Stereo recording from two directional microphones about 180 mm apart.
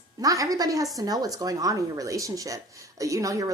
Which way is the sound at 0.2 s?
20° right (ahead or behind).